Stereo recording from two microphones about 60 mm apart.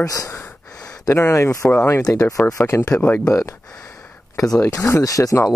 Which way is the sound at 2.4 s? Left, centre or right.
Left.